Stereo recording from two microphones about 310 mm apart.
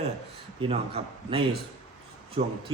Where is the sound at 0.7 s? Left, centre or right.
Centre.